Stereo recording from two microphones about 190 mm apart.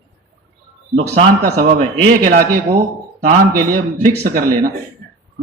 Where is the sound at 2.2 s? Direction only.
50° right (ahead or behind).